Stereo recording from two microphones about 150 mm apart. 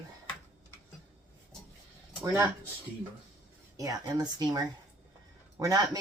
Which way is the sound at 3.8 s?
25° right (ahead or behind).